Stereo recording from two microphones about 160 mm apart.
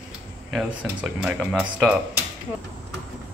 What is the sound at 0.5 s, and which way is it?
Speech, 10° right (ahead or behind).